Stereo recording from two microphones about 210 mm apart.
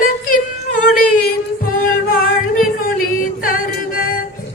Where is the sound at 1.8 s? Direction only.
45° left (ahead or behind).